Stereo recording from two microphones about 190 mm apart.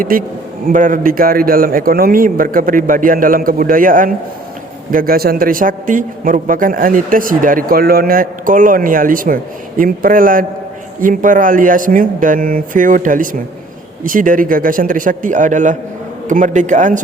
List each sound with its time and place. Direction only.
0.0 s a man's voice: 50° right (ahead or behind)